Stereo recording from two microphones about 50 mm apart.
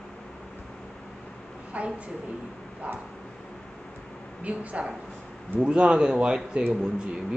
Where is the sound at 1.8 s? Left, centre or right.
Right.